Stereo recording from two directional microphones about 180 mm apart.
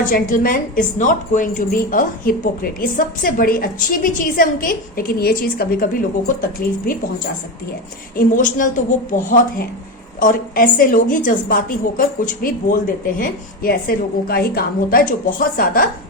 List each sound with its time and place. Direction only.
0.1 s a woman's voice: 50° left (ahead or behind)
8.1 s a woman's voice: 45° left (ahead or behind)